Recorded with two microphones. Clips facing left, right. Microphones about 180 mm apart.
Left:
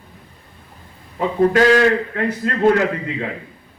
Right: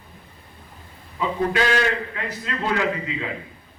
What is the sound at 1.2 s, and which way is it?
A man's voice, 45° left (ahead or behind).